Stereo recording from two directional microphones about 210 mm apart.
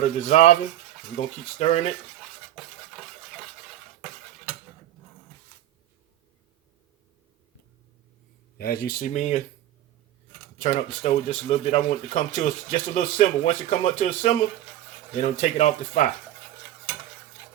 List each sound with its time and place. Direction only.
0.2 s speech: 35° left (ahead or behind)
8.5 s speech: 45° left (ahead or behind)
10.6 s speech: 30° left (ahead or behind)